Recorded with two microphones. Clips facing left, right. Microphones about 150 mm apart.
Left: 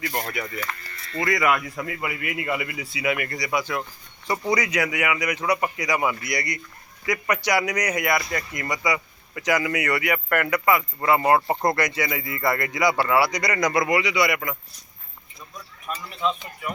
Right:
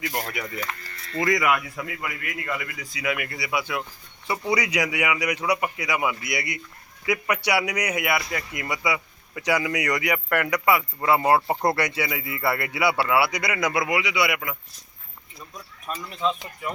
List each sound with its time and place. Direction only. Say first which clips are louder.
0.3 s a man's voice: left 1 dB; 20° right (ahead or behind)